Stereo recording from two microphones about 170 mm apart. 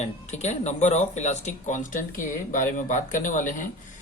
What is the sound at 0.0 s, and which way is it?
Mantra, 40° left (ahead or behind).